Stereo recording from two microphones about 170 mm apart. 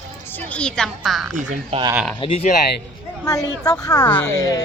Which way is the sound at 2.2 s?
35° left (ahead or behind).